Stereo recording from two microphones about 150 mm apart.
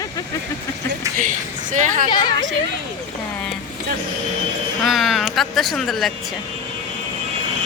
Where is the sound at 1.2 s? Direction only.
60° right (ahead or behind).